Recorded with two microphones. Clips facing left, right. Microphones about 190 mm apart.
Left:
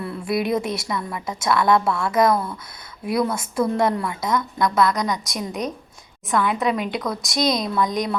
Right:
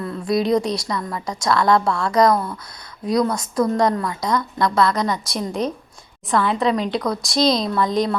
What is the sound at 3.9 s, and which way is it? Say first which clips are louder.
A woman's voice: right 1 dB; 20° left (ahead or behind).